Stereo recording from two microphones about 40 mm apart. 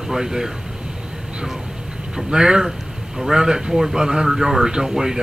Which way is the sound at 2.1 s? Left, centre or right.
Centre.